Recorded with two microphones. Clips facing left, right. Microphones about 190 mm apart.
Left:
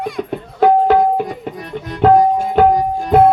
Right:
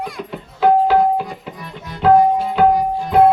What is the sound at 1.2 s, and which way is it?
Tabla, 50° left (ahead or behind).